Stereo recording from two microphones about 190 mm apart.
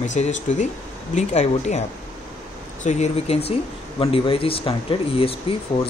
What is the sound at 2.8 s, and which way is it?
Speech, 40° left (ahead or behind).